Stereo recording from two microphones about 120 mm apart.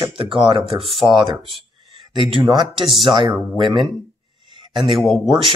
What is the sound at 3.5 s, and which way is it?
Speech, 40° right (ahead or behind).